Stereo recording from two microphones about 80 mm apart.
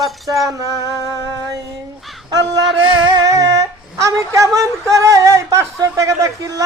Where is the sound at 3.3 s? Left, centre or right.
Right.